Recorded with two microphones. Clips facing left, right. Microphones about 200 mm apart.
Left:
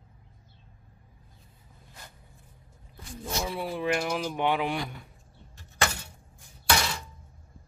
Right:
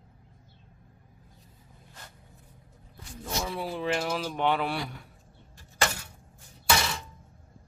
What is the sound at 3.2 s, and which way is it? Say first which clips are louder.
Speech: left 1 dB; 15° left (ahead or behind).